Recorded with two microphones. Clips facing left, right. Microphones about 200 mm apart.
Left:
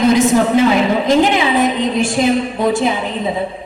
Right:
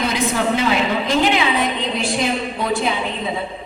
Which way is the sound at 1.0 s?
45° left (ahead or behind).